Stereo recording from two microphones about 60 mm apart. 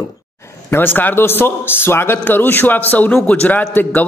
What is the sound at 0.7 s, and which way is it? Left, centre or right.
A man's voice, left.